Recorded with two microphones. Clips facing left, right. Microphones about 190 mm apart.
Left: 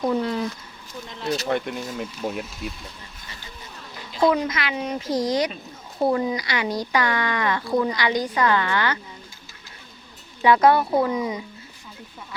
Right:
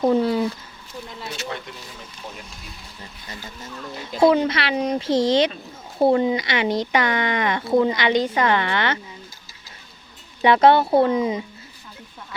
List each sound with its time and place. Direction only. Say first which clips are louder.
0.2 s speech: right 5 dB; 5° right (ahead or behind)
1.5 s speech: left 8 dB; 60° left (ahead or behind)
4.2 s speech: right 4 dB; 30° right (ahead or behind)
10.4 s speech: right 2 dB; 25° right (ahead or behind)